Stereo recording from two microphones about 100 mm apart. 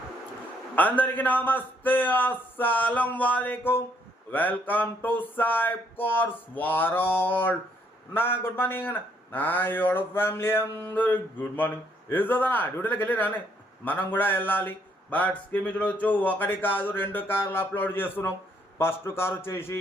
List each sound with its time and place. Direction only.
0.8 s a man's voice: 15° left (ahead or behind)